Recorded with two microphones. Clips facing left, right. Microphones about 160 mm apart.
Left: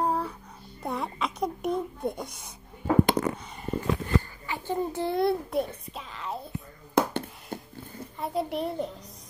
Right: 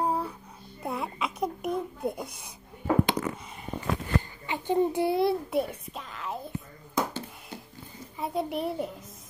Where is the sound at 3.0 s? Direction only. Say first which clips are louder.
Left 6 dB; 45° left (ahead or behind).